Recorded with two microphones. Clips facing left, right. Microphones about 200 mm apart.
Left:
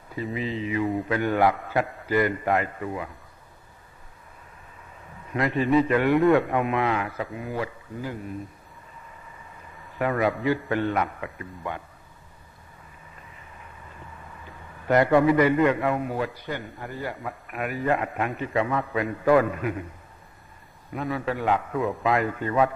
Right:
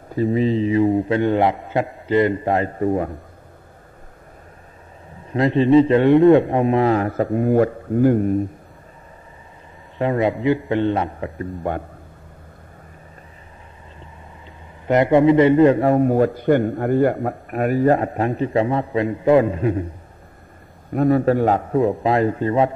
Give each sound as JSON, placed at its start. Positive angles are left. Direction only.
{"t": 0.1, "sound": "a man's voice", "side_deg": -40}
{"t": 5.3, "sound": "a man's voice", "side_deg": -30}
{"t": 9.9, "sound": "a man's voice", "side_deg": -25}
{"t": 14.9, "sound": "a man's voice", "side_deg": -20}
{"t": 20.9, "sound": "a man's voice", "side_deg": -45}